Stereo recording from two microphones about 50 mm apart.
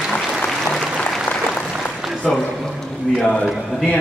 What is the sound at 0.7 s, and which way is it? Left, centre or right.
Applause, centre.